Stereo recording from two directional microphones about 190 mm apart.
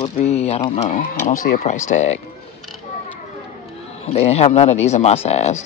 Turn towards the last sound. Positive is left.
turn(degrees=35)  # may be behind; listen again after turning